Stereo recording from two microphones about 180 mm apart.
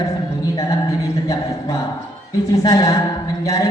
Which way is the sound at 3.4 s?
20° left (ahead or behind).